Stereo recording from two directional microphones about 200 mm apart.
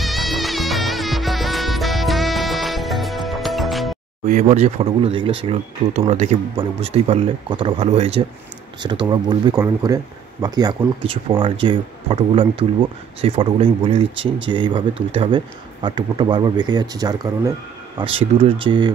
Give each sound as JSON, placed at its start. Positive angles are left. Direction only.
{"t": 0.0, "sound": "music", "side_deg": 0}
{"t": 4.3, "sound": "speech", "side_deg": -35}
{"t": 14.1, "sound": "speech", "side_deg": -70}
{"t": 14.5, "sound": "speech", "side_deg": -25}